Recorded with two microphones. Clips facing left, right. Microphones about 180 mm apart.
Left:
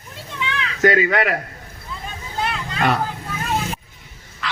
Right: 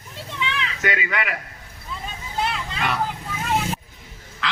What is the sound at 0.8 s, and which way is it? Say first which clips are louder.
Speech: left 10 dB; 40° left (ahead or behind).